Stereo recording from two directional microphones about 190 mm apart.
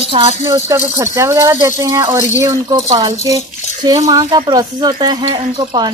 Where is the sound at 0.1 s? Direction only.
30° right (ahead or behind).